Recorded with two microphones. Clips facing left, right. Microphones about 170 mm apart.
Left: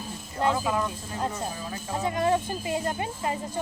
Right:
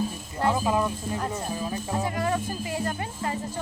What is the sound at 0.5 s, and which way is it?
Speech, 20° right (ahead or behind).